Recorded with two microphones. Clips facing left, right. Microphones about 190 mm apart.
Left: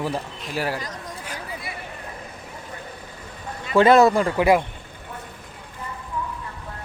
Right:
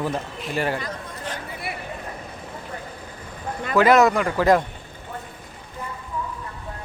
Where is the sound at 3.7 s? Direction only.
30° left (ahead or behind).